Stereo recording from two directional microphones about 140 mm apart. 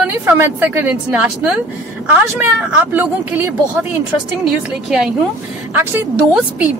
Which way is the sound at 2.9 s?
15° right (ahead or behind).